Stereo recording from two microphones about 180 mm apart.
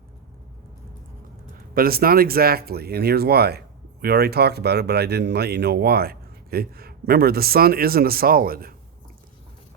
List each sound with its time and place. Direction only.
1.7 s speech: 55° right (ahead or behind)